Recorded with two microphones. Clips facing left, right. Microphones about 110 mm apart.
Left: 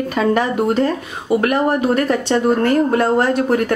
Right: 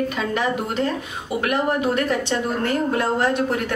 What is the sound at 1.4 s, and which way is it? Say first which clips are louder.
Speech: left 3 dB; 45° left (ahead or behind).